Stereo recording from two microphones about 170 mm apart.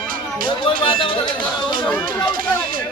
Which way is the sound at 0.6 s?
30° left (ahead or behind).